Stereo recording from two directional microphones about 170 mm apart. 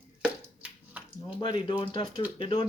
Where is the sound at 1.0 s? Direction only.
10° right (ahead or behind).